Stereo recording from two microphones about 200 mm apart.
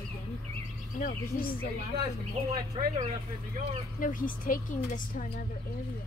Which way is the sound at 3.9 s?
45° left (ahead or behind).